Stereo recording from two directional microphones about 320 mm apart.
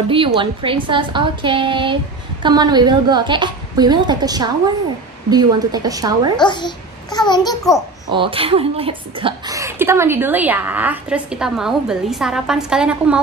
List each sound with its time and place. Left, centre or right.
0.1 s a child's voice: centre
6.3 s a child's voice: centre
8.1 s speech: centre